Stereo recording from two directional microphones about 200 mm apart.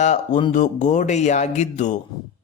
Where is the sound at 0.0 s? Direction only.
35° left (ahead or behind).